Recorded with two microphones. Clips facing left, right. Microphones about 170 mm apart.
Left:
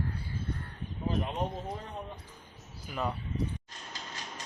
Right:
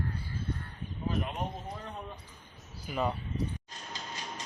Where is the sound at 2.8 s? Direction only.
5° right (ahead or behind).